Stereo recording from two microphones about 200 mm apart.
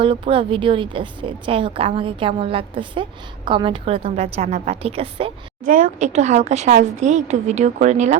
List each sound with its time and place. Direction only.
0.0 s a woman's voice: 25° right (ahead or behind)
5.6 s speech: 40° right (ahead or behind)